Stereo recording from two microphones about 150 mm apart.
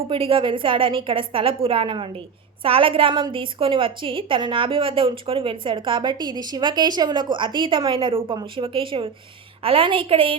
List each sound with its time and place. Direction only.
0.1 s a woman's voice: 35° right (ahead or behind)